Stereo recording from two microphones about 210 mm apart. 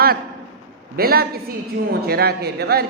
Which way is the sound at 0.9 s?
45° right (ahead or behind).